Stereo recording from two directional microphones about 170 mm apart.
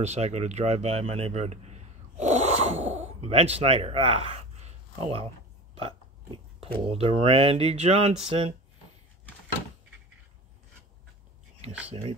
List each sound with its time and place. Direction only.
0.0 s a man's voice: 40° right (ahead or behind)
5.8 s a sound: 30° right (ahead or behind)
6.9 s speech: 35° right (ahead or behind)
11.9 s speech: 35° right (ahead or behind)